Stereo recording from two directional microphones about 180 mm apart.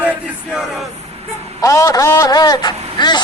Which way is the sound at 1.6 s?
20° left (ahead or behind).